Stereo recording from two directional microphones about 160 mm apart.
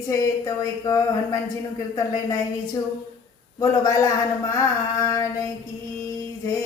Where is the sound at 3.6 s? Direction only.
20° left (ahead or behind).